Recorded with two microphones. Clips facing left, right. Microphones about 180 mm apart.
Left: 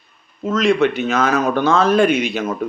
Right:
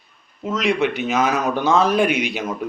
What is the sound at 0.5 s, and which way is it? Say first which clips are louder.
A man's voice: left 4 dB; 15° right (ahead or behind).